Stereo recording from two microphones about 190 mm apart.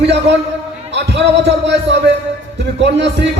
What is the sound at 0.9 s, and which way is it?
A man's voice, 65° right (ahead or behind).